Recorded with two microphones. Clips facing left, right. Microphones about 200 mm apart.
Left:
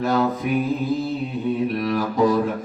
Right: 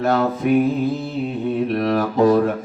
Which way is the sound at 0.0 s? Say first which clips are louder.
Right 2 dB; 60° right (ahead or behind).